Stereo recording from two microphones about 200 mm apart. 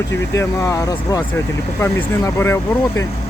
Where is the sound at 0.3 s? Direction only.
15° left (ahead or behind).